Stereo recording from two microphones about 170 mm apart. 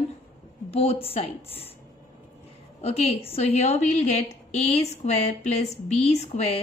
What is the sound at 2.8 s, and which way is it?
A woman's voice, 35° left (ahead or behind).